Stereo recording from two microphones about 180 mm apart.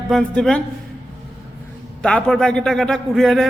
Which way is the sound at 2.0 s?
5° left (ahead or behind).